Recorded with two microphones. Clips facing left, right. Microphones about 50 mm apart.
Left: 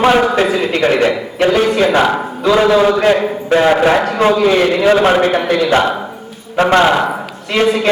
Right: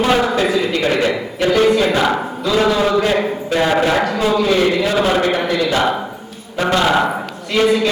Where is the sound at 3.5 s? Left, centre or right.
Left.